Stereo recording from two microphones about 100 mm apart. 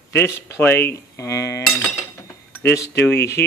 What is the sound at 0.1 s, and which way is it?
Speech, 25° left (ahead or behind).